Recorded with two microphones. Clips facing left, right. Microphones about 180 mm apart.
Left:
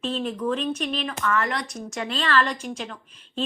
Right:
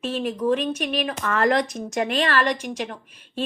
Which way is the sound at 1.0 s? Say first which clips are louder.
Even; 30° right (ahead or behind).